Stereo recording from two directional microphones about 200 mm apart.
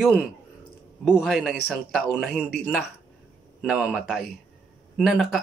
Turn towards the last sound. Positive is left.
turn(degrees=0)  # may be behind; listen again after turning